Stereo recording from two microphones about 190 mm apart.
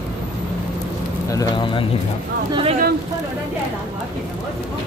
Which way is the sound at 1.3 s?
20° left (ahead or behind).